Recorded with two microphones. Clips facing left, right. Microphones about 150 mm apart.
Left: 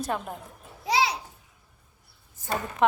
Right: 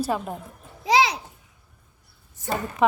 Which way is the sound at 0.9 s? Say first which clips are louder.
Right 5 dB; 90° right.